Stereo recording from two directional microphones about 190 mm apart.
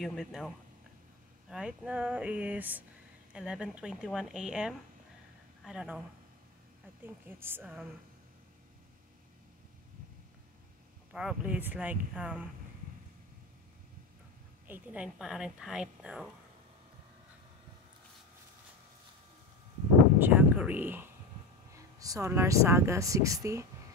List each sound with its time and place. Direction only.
0.0 s a woman's voice: centre (ahead or behind)
1.5 s a woman's voice: 5° right (ahead or behind)
11.1 s speech: 5° right (ahead or behind)
14.7 s a woman's voice: 10° right (ahead or behind)
20.2 s speech: 10° right (ahead or behind)